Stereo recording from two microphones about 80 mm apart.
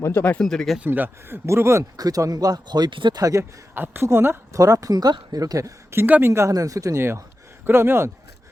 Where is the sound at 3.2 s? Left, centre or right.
Right.